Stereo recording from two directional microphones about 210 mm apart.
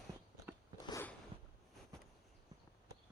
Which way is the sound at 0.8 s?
20° left (ahead or behind).